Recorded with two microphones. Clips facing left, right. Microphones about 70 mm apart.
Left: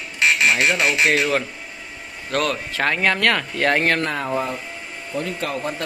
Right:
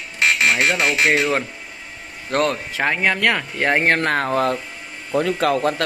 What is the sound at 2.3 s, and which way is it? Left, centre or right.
Speech, right.